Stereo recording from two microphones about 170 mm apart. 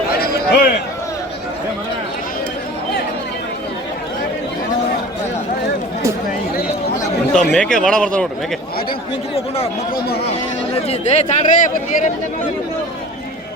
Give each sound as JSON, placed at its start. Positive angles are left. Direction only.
{"t": 0.2, "sound": "a sound", "side_deg": 65}
{"t": 7.5, "sound": "speech", "side_deg": 5}
{"t": 10.8, "sound": "a man's voice", "side_deg": 40}